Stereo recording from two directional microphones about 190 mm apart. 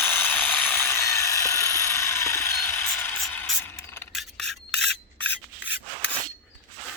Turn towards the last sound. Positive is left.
turn(degrees=70)  # may be behind; listen again after turning